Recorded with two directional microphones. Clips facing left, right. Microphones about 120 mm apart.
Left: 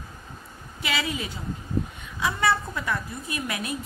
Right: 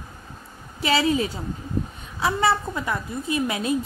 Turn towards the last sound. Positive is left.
turn(degrees=-25)  # may be behind; listen again after turning